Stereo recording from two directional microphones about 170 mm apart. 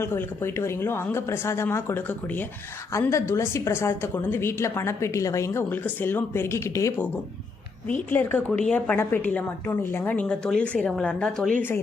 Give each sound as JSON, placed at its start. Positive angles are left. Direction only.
{"t": 0.0, "sound": "a woman's voice", "side_deg": 15}
{"t": 8.1, "sound": "a woman's voice", "side_deg": 10}